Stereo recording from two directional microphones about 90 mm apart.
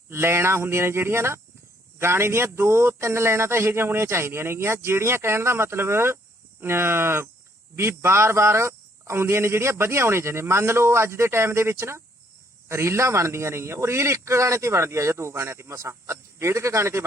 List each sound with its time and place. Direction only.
0.1 s a man's voice: 30° right (ahead or behind)